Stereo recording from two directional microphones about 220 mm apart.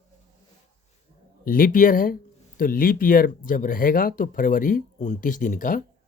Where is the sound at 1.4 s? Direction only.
40° left (ahead or behind).